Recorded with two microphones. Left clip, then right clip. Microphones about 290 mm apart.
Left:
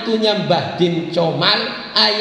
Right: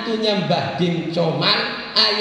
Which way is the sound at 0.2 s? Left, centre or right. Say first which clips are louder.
Left 2 dB; left.